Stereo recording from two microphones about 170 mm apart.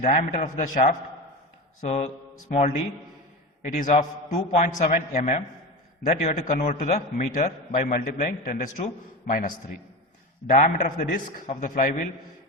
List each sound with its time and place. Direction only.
0.0 s a man's voice: 45° left (ahead or behind)
3.6 s a man's voice: 45° left (ahead or behind)
10.5 s a man's voice: 45° left (ahead or behind)